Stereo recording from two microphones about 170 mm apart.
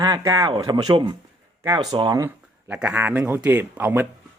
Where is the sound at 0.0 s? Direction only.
20° right (ahead or behind).